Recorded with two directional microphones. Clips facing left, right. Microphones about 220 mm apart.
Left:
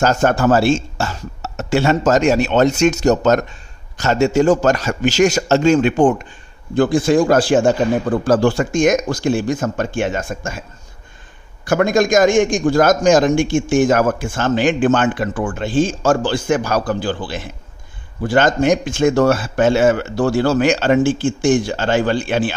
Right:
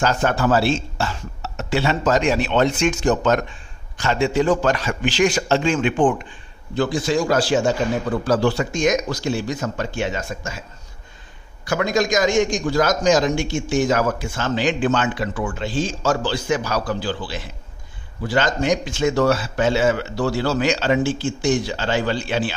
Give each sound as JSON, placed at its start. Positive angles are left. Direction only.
{"t": 0.0, "sound": "a man's voice", "side_deg": 45}
{"t": 11.6, "sound": "a man's voice", "side_deg": 50}